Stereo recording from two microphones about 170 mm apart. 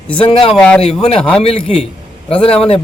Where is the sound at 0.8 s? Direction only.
35° left (ahead or behind).